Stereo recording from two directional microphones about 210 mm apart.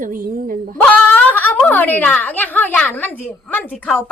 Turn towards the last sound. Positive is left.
turn(degrees=5)  # may be behind; listen again after turning